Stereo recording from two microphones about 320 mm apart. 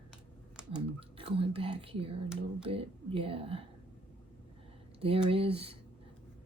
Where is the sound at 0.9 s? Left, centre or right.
Centre.